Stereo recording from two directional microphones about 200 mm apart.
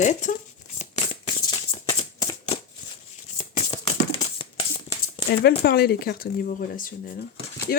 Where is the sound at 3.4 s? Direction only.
35° left (ahead or behind).